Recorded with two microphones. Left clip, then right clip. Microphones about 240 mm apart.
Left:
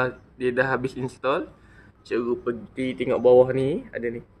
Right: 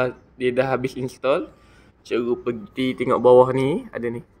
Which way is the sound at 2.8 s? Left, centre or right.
Right.